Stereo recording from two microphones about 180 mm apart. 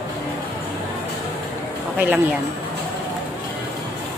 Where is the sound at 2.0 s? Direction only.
10° right (ahead or behind).